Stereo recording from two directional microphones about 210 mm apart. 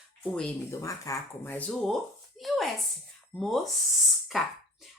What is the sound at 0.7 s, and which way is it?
Speech, 15° left (ahead or behind).